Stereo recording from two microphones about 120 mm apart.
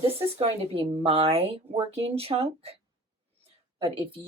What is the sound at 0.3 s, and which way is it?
Speech, 55° right (ahead or behind).